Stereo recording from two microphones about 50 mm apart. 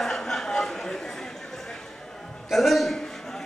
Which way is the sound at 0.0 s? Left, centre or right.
Centre.